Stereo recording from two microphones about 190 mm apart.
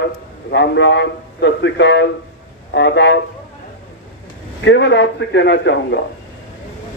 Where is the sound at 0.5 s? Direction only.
70° left (ahead or behind).